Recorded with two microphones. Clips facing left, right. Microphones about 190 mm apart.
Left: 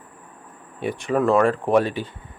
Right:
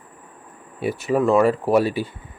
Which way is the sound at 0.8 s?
5° right (ahead or behind).